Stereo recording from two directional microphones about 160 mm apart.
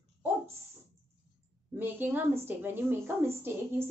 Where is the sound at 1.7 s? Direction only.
10° right (ahead or behind).